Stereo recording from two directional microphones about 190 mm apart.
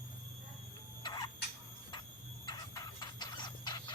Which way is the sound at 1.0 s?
20° left (ahead or behind).